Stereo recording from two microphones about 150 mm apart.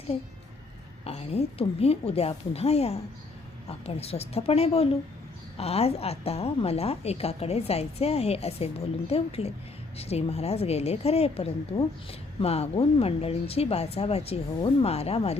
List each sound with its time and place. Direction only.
1.0 s a woman's voice: 40° left (ahead or behind)